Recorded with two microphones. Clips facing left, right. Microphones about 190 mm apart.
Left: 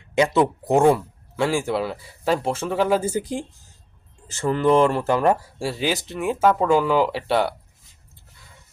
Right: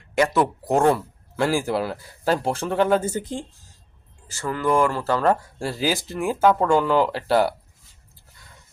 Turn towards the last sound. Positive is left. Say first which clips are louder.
# right 1 dB
turn(degrees=0)  # may be behind; listen again after turning